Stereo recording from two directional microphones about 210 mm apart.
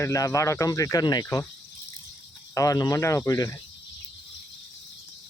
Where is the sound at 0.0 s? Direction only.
15° left (ahead or behind).